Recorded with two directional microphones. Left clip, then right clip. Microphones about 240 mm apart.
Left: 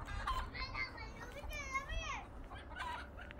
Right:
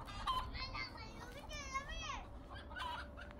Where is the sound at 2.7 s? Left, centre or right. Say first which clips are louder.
Even; right.